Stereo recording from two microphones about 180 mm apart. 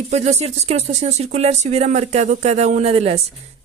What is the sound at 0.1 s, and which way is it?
Speech, 40° right (ahead or behind).